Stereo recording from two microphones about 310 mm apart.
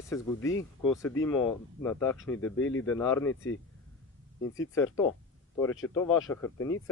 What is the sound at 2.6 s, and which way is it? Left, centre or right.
Speech, left.